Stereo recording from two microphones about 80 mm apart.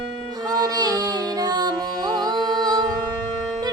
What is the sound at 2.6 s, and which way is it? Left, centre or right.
Music, right.